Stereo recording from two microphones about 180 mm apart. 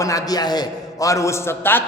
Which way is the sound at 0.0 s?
20° left (ahead or behind).